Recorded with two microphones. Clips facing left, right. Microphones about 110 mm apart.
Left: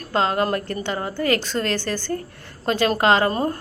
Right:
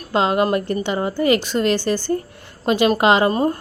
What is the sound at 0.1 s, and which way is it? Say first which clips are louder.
Speech: right 3 dB; 15° right (ahead or behind).